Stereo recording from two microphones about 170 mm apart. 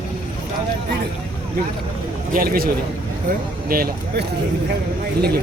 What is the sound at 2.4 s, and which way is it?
A man's voice, 60° right (ahead or behind).